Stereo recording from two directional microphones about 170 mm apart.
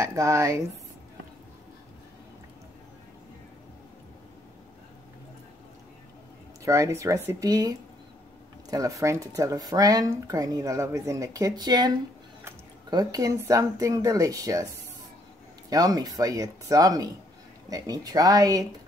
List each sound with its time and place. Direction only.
0.0 s speech: 20° right (ahead or behind)
6.6 s speech: 20° right (ahead or behind)
12.9 s speech: 20° right (ahead or behind)
15.7 s speech: 20° right (ahead or behind)